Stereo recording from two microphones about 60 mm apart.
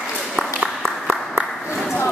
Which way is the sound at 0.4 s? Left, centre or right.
Right.